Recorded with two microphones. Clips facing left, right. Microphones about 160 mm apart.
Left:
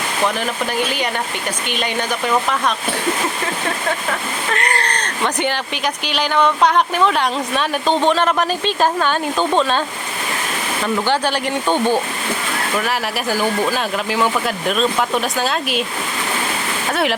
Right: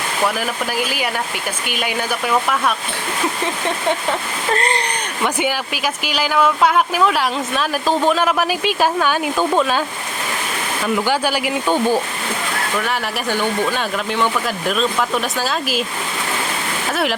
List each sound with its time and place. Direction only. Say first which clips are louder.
0.3 s speech: left 1 dB; 5° right (ahead or behind)
4.5 s a sound: right 3 dB; 30° right (ahead or behind)
4.8 s speech: even; 10° right (ahead or behind)
10.8 s speech: even; 5° right (ahead or behind)
16.9 s speech: left 1 dB; centre (ahead or behind)